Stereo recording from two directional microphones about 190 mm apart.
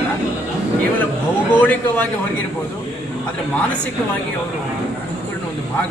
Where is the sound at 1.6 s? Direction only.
10° left (ahead or behind).